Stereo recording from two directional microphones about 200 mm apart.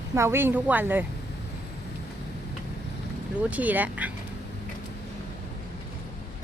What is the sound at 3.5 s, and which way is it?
Speech, 10° right (ahead or behind).